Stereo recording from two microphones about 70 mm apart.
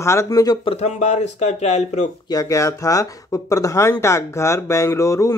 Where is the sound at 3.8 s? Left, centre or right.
Left.